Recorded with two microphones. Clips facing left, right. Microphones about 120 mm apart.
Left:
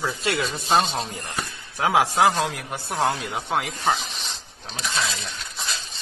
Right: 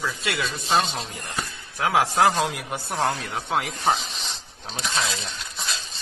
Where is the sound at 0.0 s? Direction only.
30° left (ahead or behind).